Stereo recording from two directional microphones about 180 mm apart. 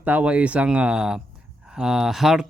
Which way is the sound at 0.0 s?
10° right (ahead or behind).